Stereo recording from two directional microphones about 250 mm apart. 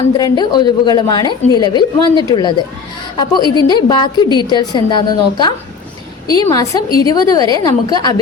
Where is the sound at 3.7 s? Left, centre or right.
Centre.